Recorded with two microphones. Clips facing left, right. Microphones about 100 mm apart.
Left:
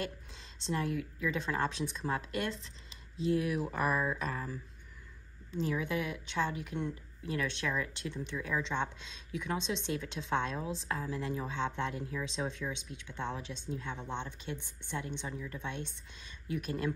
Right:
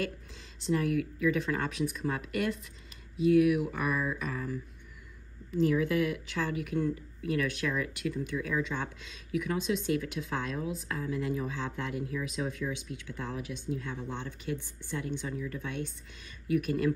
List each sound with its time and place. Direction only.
0.6 s speech: 25° left (ahead or behind)